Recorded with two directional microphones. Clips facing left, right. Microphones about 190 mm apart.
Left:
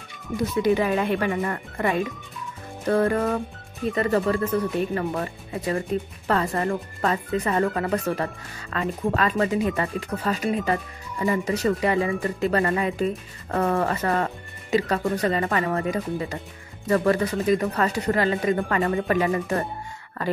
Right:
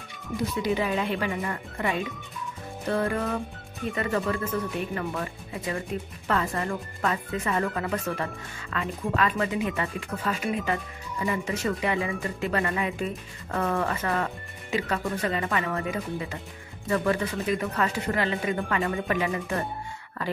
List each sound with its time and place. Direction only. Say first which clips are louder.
0.6 s speech: left 6 dB; 55° left (ahead or behind)
3.9 s speech: left 5 dB; 35° left (ahead or behind)